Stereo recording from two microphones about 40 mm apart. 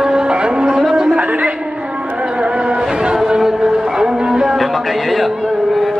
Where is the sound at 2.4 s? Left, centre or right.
Right.